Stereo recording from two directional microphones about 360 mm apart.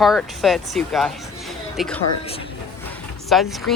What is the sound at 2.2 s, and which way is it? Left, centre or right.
Speech, centre.